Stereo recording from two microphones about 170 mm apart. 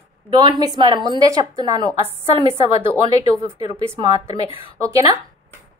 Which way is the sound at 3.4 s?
15° right (ahead or behind).